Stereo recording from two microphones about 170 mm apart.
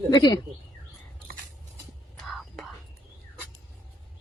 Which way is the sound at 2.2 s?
Centre (ahead or behind).